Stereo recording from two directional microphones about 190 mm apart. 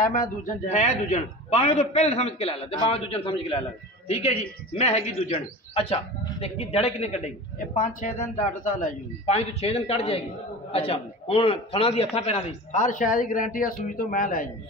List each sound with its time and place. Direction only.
0.0 s a man's voice: 45° left (ahead or behind)